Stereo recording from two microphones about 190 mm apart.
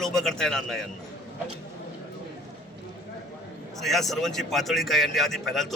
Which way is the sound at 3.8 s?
Centre (ahead or behind).